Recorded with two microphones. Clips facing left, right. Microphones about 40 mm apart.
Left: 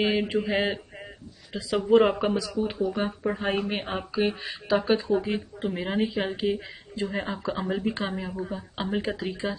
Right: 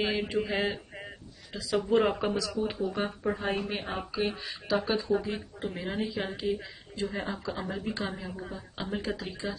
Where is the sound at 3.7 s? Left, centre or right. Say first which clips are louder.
Left 4 dB; left.